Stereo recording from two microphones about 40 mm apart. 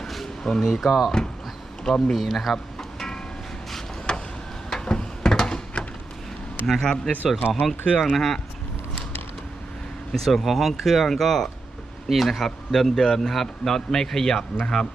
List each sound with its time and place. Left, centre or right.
0.6 s speech: centre
1.2 s a sound: centre
1.8 s a man's voice: centre
2.1 s speech: centre
2.7 s music: centre
4.1 s a sound: left
6.7 s a man's voice: centre
7.5 s a man's voice: centre
10.1 s a man's voice: centre